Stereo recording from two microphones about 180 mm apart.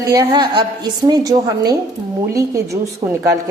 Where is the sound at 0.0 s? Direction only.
20° right (ahead or behind).